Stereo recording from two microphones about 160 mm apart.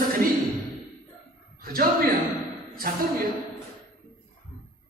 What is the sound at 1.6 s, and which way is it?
Speech, 65° right (ahead or behind).